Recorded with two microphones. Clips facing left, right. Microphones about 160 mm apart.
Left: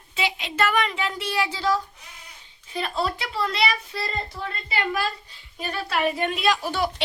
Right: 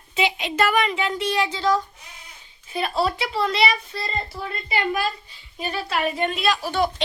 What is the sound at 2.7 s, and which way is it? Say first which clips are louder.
A child's voice: right 3 dB; 5° right (ahead or behind).